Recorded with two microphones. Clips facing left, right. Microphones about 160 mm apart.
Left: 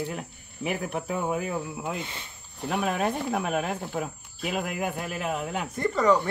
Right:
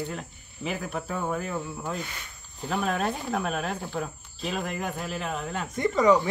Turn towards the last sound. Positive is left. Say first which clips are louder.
# right 2 dB
turn(degrees=-10)  # may be behind; listen again after turning